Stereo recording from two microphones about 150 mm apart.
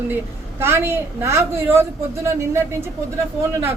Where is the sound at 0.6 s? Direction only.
15° right (ahead or behind).